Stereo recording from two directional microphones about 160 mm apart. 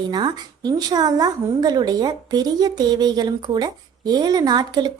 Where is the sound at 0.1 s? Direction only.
25° right (ahead or behind).